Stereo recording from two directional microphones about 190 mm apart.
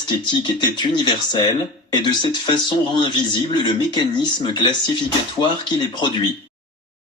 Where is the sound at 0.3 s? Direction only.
25° left (ahead or behind).